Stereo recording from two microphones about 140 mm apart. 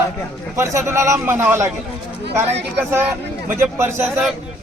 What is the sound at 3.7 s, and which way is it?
Speech, 15° right (ahead or behind).